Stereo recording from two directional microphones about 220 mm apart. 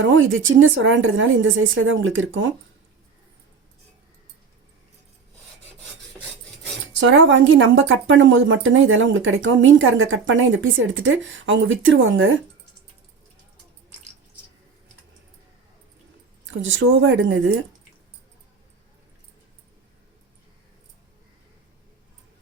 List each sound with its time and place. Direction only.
0.0 s speech: 60° right (ahead or behind)
7.0 s speech: 60° right (ahead or behind)
16.5 s speech: 60° right (ahead or behind)